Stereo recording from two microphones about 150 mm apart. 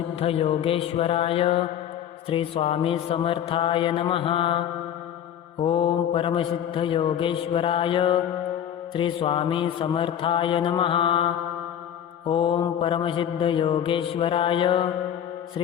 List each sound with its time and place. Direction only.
0.2 s mantra: 40° left (ahead or behind)
5.6 s mantra: 35° left (ahead or behind)